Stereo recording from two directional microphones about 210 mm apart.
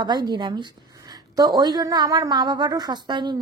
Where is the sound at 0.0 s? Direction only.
20° right (ahead or behind).